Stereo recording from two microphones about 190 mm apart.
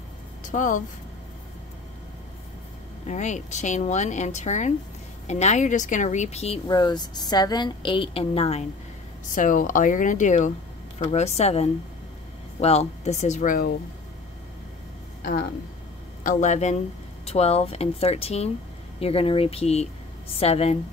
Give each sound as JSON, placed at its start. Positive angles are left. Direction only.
{"t": 0.4, "sound": "a sound", "side_deg": 40}
{"t": 3.1, "sound": "speech", "side_deg": 40}
{"t": 9.3, "sound": "speech", "side_deg": 45}
{"t": 16.3, "sound": "speech", "side_deg": 40}